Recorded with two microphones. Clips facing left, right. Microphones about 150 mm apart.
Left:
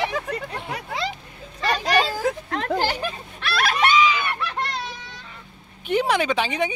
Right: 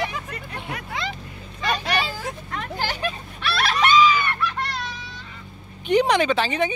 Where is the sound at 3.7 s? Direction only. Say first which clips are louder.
Right 3 dB; 10° left (ahead or behind).